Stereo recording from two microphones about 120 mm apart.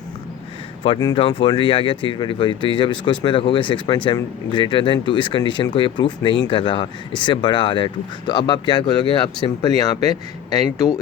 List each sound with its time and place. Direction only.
1.1 s speech: 45° left (ahead or behind)